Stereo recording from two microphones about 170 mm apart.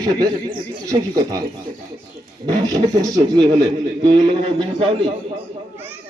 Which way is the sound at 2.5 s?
25° right (ahead or behind).